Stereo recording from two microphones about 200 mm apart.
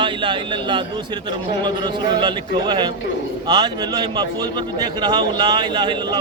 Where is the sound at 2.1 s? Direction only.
25° right (ahead or behind).